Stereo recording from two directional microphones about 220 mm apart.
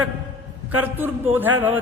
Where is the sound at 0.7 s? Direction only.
10° right (ahead or behind).